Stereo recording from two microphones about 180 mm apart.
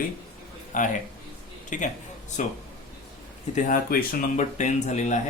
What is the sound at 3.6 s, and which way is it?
Speech, 50° left (ahead or behind).